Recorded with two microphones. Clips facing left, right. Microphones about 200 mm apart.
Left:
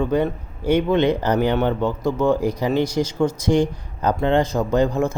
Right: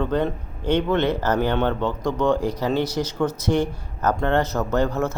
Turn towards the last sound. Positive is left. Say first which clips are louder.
# left 3 dB
turn(degrees=10)  # may be behind; listen again after turning